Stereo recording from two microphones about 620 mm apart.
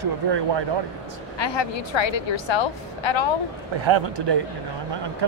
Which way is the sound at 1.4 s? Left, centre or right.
Left.